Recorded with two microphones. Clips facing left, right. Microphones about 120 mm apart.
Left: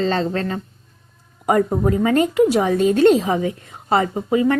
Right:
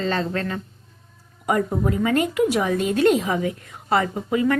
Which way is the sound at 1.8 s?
30° left (ahead or behind).